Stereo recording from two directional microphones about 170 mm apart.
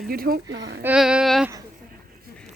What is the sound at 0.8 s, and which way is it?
Speech, 5° right (ahead or behind).